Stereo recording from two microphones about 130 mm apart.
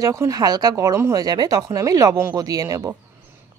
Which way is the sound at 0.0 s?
25° right (ahead or behind).